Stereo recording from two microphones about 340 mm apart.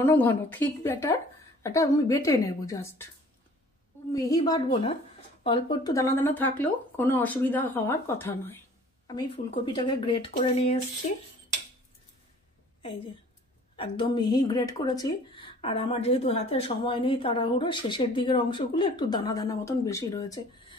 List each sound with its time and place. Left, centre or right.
0.0 s speech: centre
4.1 s speech: centre
13.7 s speech: centre